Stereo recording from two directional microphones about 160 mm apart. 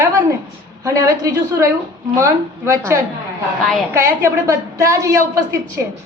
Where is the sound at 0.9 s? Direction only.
20° right (ahead or behind).